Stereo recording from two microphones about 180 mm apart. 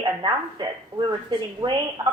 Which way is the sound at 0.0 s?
25° right (ahead or behind).